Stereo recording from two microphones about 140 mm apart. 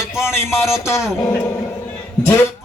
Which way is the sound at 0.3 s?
20° left (ahead or behind).